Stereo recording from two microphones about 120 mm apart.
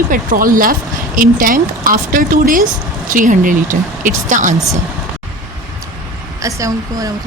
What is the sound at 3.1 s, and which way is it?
Speech, 90° right.